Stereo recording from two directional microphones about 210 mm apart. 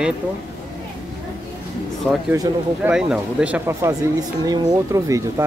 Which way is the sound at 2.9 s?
5° right (ahead or behind).